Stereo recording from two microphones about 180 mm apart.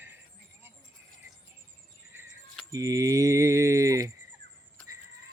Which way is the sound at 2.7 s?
20° right (ahead or behind).